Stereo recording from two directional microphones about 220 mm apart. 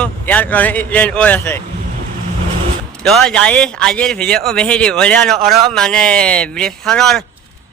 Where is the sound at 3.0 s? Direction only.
Centre (ahead or behind).